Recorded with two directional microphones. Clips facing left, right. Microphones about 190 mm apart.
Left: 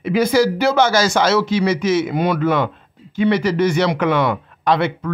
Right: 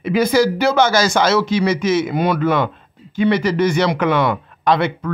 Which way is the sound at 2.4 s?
35° left (ahead or behind).